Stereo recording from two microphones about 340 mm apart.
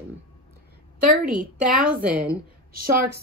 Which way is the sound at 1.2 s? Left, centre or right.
Centre.